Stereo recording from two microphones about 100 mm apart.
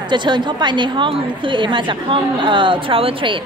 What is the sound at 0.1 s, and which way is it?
Speech, 50° right (ahead or behind).